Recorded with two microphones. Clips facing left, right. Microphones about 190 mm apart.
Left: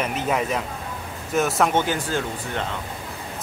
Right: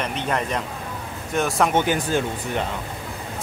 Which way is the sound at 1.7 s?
15° right (ahead or behind).